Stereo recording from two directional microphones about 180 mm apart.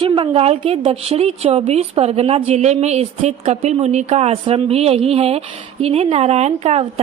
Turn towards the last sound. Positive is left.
turn(degrees=-35)  # may be behind; listen again after turning